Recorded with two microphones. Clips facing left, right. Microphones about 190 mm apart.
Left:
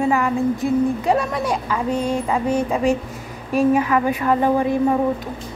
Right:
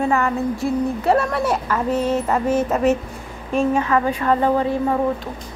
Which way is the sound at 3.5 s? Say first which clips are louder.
Left 2 dB; 10° left (ahead or behind).